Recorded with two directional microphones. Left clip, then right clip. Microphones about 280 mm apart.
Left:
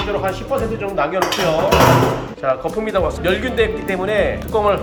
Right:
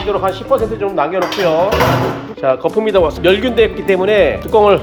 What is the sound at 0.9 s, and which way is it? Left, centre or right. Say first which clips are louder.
Dishes: right 1 dB; centre.